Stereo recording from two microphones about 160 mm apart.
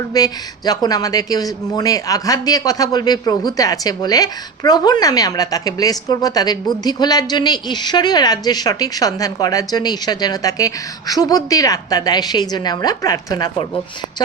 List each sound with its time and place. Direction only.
0.1 s speech: 25° left (ahead or behind)